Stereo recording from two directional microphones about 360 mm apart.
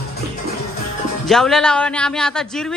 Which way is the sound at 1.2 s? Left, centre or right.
Centre.